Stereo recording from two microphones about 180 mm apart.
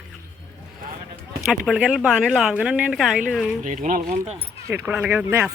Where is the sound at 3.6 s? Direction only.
45° right (ahead or behind).